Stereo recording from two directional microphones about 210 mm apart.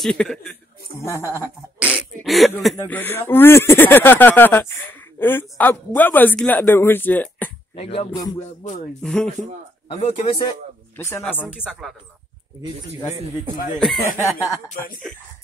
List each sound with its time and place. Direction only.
0.0 s a man's voice: 5° left (ahead or behind)
1.0 s speech: 15° left (ahead or behind)
1.3 s speech: 10° right (ahead or behind); by 7.5 s 10° left (ahead or behind)
7.7 s music: 30° left (ahead or behind)
9.0 s a man's voice: centre (ahead or behind)
9.8 s speech: 30° left (ahead or behind)
11.0 s speech: 10° left (ahead or behind)
11.5 s a man's voice: 5° right (ahead or behind)
13.1 s a man's voice: 30° right (ahead or behind)
13.7 s a man's voice: centre (ahead or behind)